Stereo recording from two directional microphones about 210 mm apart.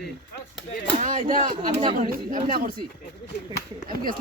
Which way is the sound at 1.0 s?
40° right (ahead or behind).